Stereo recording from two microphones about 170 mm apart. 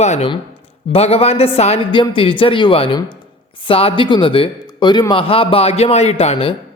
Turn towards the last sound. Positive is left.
turn(degrees=35)  # may be behind; listen again after turning